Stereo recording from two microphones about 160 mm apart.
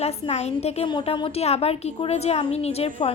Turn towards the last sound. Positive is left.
turn(degrees=35)  # may be behind; listen again after turning